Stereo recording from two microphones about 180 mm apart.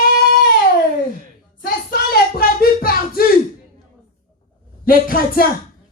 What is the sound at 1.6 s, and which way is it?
Speech, 55° left (ahead or behind).